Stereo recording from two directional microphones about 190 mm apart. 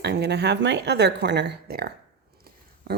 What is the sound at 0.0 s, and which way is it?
A woman's voice, 60° right (ahead or behind).